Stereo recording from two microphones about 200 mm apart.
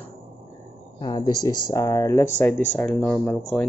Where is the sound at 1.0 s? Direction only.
20° left (ahead or behind).